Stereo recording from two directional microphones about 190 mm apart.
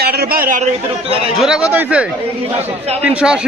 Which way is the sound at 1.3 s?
5° right (ahead or behind).